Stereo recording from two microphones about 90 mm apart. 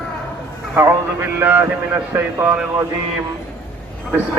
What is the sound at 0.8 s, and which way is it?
Speech, 25° right (ahead or behind).